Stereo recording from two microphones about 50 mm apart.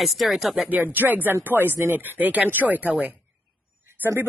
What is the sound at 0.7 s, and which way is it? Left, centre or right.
A woman's voice, right.